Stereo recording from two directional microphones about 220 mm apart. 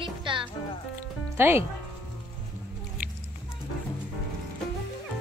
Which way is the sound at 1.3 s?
10° right (ahead or behind).